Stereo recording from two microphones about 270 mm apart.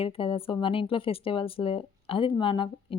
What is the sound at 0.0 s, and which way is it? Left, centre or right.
Speech, centre.